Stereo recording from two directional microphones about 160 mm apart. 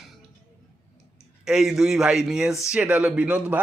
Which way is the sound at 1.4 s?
5° right (ahead or behind).